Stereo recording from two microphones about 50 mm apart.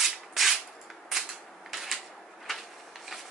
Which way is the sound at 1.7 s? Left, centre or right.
Centre.